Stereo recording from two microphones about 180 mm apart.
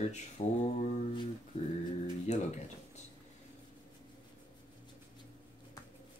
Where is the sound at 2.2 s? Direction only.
40° left (ahead or behind).